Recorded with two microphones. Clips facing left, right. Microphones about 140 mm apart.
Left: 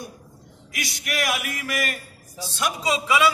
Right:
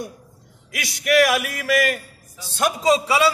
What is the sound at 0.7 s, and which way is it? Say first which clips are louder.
Speech: right 11 dB; 90° right.